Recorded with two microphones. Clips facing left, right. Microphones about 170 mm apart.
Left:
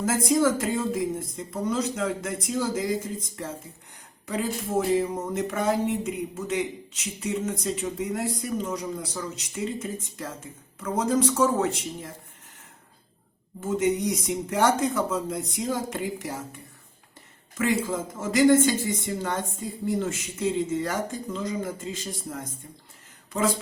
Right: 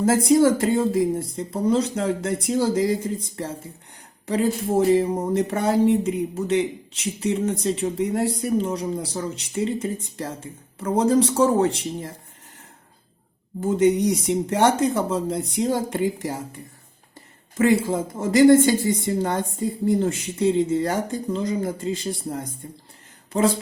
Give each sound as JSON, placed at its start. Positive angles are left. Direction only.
{"t": 0.0, "sound": "speech", "side_deg": -30}
{"t": 4.9, "sound": "speech", "side_deg": -35}
{"t": 13.6, "sound": "speech", "side_deg": -30}
{"t": 17.6, "sound": "speech", "side_deg": -30}